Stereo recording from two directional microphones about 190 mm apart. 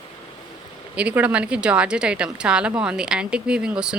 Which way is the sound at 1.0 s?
5° right (ahead or behind).